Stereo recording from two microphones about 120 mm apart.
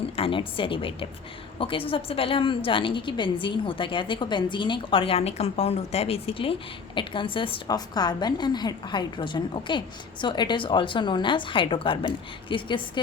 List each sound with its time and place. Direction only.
0.2 s a woman's voice: 45° left (ahead or behind)